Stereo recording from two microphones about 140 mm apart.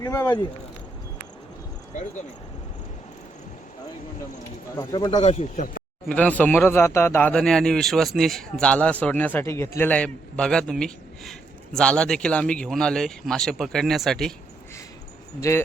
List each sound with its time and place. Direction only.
0.0 s speech: 20° left (ahead or behind)
4.8 s speech: 30° left (ahead or behind)
5.2 s speech: 50° left (ahead or behind)
6.1 s a man's voice: 10° left (ahead or behind)
15.4 s speech: 20° left (ahead or behind)